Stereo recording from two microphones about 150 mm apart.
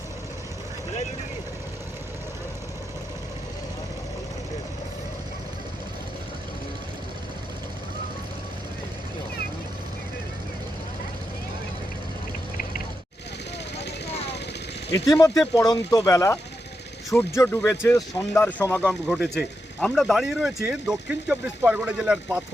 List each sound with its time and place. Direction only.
15.2 s speech: 25° left (ahead or behind); by 22.4 s 5° right (ahead or behind)